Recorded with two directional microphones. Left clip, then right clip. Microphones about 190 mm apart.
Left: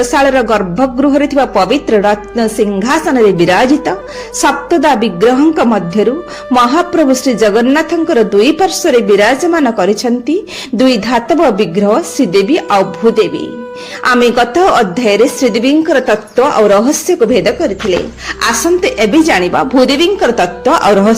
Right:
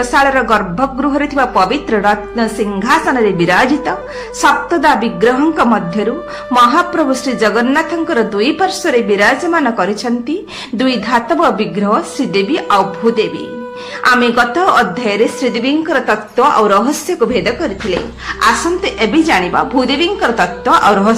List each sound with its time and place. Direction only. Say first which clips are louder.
0.1 s a woman's voice: right 2 dB; 35° left (ahead or behind)